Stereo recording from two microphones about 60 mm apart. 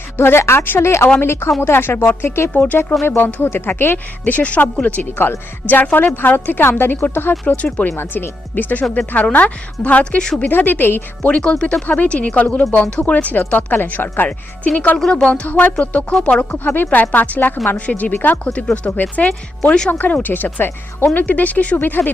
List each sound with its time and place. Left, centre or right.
0.2 s speech: left
2.5 s a woman's voice: left
7.5 s a woman's voice: left
7.9 s a woman's voice: left
10.0 s speech: centre
10.4 s speech: left
11.3 s a woman's voice: centre
14.9 s speech: centre
15.3 s a woman's voice: left
16.6 s speech: left
16.9 s a woman's voice: left
18.4 s a woman's voice: centre